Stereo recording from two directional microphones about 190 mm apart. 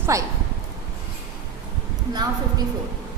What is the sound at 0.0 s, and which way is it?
Speech, 15° right (ahead or behind).